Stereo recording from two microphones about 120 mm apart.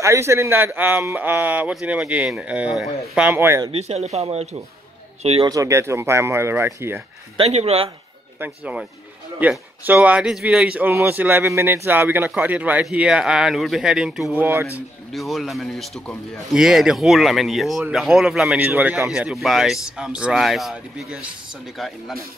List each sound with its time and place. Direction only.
0.0 s a man's voice: 25° right (ahead or behind)
3.7 s a man's voice: 65° right (ahead or behind)
5.4 s speech: 30° right (ahead or behind)
7.3 s a man's voice: 60° right (ahead or behind)
8.4 s a man's voice: 15° right (ahead or behind)
14.4 s speech: 20° right (ahead or behind)
15.1 s speech: centre (ahead or behind)